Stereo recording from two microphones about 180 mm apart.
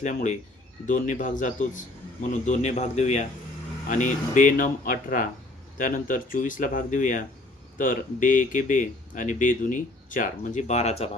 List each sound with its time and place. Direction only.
0.0 s a man's voice: 40° left (ahead or behind)